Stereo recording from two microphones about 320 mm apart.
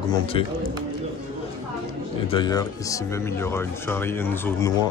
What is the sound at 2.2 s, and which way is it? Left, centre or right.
Speech, centre.